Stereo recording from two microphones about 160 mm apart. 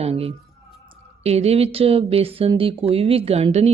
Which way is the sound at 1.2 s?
40° right (ahead or behind).